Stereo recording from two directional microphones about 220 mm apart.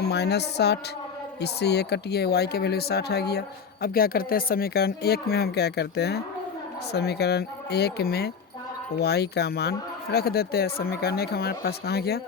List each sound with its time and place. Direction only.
0.1 s speech: 50° left (ahead or behind)